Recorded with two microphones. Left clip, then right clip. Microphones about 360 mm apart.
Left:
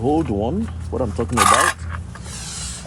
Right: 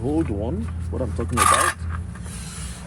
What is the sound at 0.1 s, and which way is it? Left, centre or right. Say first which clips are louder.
Speech: left 4 dB; left.